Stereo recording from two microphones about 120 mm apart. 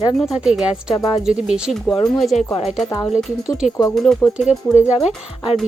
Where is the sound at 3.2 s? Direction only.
5° right (ahead or behind).